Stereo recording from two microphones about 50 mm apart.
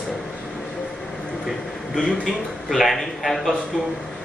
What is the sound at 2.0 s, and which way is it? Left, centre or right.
A man's voice, centre.